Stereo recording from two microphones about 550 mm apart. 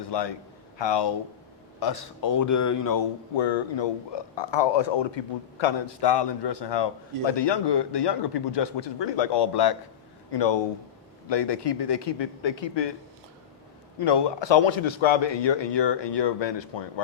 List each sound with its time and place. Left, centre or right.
0.1 s a man's voice: left
3.3 s a man's voice: left
14.0 s a man's voice: left